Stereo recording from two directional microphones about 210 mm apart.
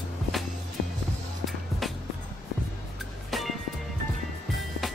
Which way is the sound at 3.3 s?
Centre (ahead or behind).